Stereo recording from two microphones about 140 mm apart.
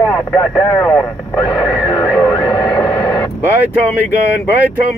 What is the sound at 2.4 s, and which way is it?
Radio, 25° left (ahead or behind).